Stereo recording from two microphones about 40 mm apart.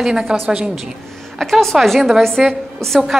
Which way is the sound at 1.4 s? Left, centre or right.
Centre.